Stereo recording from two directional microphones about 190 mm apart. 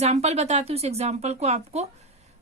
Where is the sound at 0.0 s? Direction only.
35° right (ahead or behind).